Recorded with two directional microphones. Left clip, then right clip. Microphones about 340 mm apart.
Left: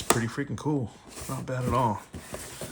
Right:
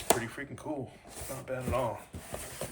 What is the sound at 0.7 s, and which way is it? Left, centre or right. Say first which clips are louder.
Speech: left 7 dB; left.